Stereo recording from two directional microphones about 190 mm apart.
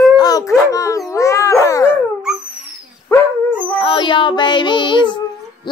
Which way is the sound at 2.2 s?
5° right (ahead or behind).